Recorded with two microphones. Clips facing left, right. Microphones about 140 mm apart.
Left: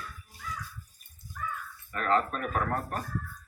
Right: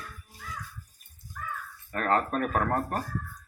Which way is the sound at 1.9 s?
50° right (ahead or behind).